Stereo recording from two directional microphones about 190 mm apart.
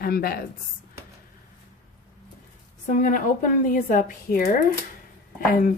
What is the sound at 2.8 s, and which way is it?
Speech, 45° left (ahead or behind).